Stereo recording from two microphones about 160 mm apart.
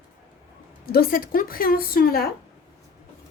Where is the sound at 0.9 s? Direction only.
65° left (ahead or behind).